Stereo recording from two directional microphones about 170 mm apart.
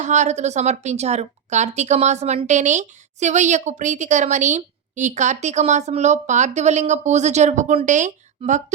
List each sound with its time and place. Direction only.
0.0 s a woman's voice: 45° right (ahead or behind)